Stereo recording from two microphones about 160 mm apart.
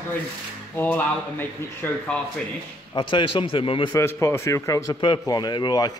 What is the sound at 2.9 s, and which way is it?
Speech, 30° left (ahead or behind).